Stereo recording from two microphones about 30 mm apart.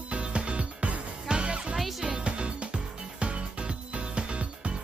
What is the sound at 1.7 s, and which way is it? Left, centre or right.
Music, centre.